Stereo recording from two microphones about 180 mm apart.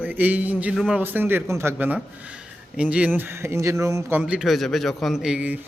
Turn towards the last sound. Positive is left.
turn(degrees=-5)  # may be behind; listen again after turning